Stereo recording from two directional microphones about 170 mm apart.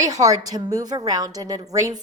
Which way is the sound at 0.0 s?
20° right (ahead or behind).